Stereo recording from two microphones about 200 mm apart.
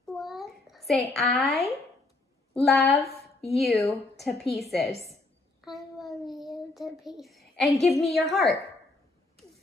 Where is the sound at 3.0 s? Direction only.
30° left (ahead or behind).